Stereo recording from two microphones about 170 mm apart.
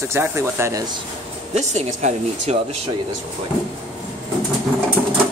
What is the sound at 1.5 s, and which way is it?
Speech, 40° right (ahead or behind).